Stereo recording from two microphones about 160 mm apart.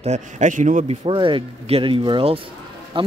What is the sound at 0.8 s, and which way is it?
A man's voice, 35° right (ahead or behind).